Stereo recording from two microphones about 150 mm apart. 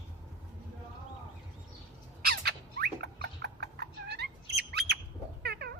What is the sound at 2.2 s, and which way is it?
Cat, 90° right.